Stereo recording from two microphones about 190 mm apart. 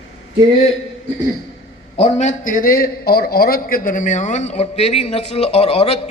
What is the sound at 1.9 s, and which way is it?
A man's voice, 35° left (ahead or behind).